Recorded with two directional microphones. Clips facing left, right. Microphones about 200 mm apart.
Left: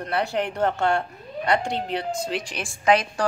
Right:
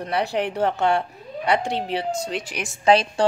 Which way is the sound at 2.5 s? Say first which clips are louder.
Right 2 dB; 20° right (ahead or behind).